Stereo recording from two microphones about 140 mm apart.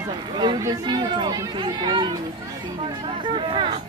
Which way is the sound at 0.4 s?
30° right (ahead or behind).